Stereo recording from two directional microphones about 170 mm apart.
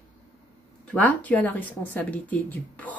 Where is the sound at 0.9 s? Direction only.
10° left (ahead or behind).